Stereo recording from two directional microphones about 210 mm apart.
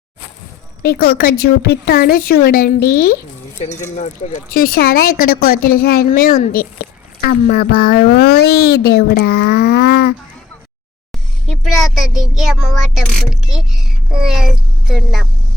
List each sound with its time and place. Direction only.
0.8 s speech: 45° left (ahead or behind)
3.6 s speech: 35° left (ahead or behind); by 10.2 s 50° left (ahead or behind)
11.8 s speech: centre (ahead or behind)